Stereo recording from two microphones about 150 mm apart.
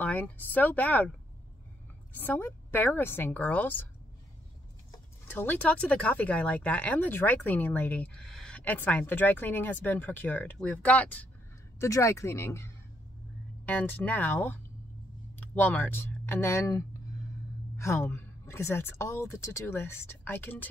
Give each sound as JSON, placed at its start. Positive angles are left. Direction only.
{"t": 0.0, "sound": "speech", "side_deg": 10}
{"t": 2.1, "sound": "speech", "side_deg": 15}
{"t": 5.3, "sound": "speech", "side_deg": 10}
{"t": 11.8, "sound": "speech", "side_deg": 20}